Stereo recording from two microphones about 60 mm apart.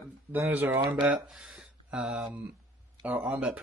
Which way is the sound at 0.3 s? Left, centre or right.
Right.